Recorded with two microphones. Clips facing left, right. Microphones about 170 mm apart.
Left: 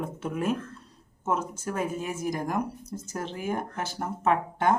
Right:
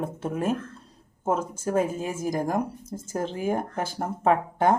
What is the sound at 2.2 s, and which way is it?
Speech, 45° right (ahead or behind).